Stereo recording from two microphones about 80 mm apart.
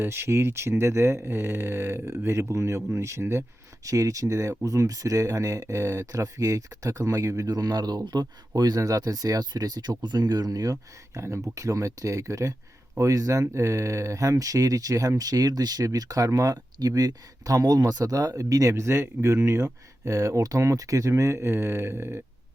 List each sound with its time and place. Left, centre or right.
0.0 s speech: right